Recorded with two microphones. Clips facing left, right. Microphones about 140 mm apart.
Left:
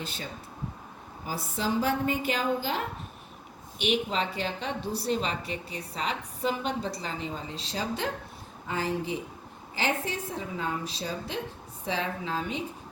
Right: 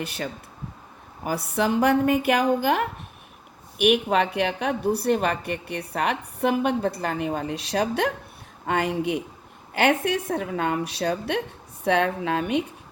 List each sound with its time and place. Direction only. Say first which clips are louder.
0.0 s a woman's voice: right 7 dB; 70° right (ahead or behind)